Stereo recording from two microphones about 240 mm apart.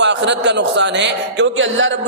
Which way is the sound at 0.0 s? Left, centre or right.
Right.